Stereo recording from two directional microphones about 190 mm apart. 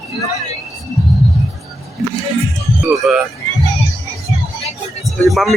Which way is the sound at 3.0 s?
Centre (ahead or behind).